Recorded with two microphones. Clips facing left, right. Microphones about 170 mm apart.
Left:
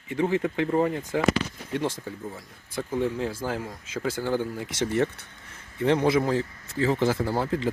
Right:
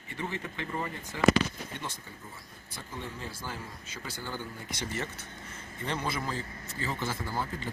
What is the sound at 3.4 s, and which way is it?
Speech, 90° left.